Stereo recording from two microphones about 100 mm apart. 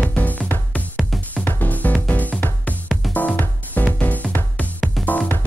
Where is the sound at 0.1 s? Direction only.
15° left (ahead or behind).